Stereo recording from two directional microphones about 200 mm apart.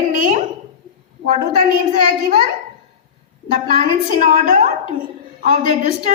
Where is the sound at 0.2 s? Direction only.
40° right (ahead or behind).